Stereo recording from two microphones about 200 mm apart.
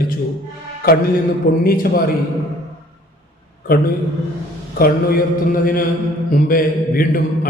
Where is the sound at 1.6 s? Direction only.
45° left (ahead or behind).